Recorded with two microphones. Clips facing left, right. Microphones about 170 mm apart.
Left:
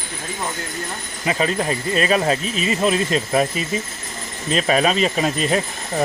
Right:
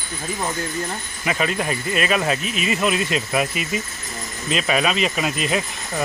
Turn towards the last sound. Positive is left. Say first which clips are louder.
# left 3 dB
turn(degrees=35)  # may be behind; listen again after turning